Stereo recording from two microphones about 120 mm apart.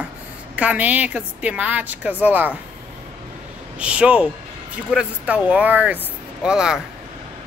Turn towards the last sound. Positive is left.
turn(degrees=-5)  # may be behind; listen again after turning